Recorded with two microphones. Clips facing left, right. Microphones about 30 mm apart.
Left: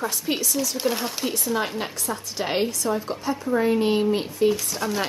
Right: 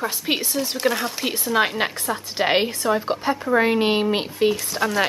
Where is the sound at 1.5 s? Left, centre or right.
Right.